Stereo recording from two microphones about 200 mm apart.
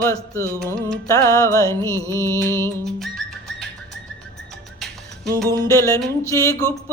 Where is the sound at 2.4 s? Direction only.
10° left (ahead or behind).